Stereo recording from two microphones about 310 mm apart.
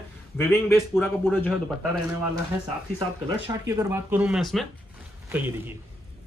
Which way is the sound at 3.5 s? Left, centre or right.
Centre.